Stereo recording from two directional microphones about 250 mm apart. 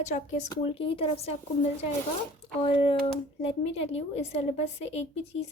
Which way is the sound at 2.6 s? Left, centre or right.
Left.